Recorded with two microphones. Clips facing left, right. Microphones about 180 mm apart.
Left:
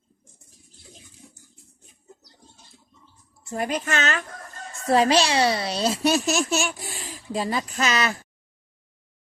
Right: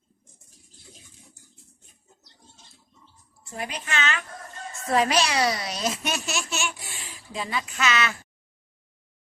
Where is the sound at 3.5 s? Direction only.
45° left (ahead or behind).